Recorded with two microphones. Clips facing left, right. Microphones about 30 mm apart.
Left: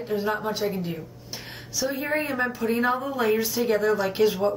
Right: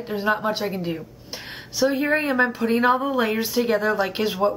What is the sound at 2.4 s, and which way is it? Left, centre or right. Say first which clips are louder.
Speech: right 6 dB; right.